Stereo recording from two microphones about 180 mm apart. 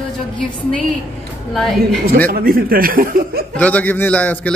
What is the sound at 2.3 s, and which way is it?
Speech, 55° right (ahead or behind).